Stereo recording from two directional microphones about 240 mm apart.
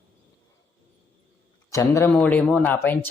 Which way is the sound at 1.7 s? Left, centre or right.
Centre.